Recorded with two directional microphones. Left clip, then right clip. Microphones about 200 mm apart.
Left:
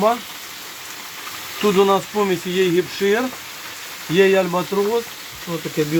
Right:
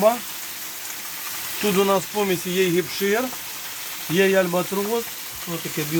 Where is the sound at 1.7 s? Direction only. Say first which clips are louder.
Left 4 dB; centre (ahead or behind).